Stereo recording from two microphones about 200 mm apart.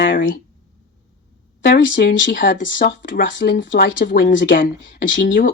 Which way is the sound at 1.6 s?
50° left (ahead or behind).